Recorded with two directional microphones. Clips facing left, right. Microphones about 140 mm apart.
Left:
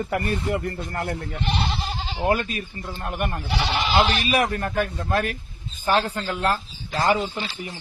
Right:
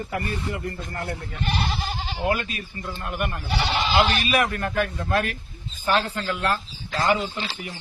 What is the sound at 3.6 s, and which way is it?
Speech, 10° left (ahead or behind).